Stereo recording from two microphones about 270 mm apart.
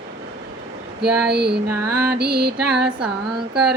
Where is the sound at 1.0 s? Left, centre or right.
Right.